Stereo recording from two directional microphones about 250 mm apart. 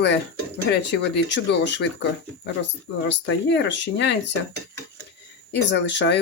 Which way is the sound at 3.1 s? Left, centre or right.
Left.